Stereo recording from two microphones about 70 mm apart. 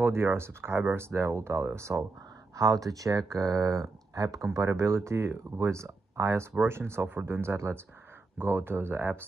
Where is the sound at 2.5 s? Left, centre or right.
Right.